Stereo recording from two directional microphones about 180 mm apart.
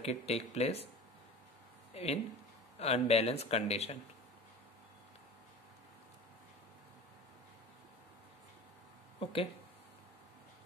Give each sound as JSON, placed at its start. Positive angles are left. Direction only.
{"t": 0.0, "sound": "speech", "side_deg": 35}
{"t": 2.0, "sound": "speech", "side_deg": 35}
{"t": 9.2, "sound": "speech", "side_deg": 30}